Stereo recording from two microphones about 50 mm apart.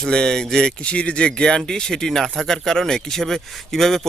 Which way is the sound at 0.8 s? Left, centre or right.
Left.